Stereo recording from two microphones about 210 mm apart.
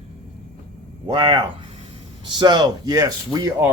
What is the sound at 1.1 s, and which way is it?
Speech, 20° right (ahead or behind).